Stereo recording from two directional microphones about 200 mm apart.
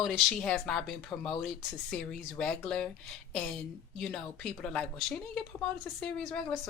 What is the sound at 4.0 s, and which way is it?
A woman's voice, 5° left (ahead or behind).